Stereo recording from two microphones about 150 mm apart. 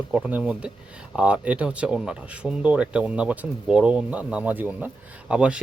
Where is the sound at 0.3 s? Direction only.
10° right (ahead or behind).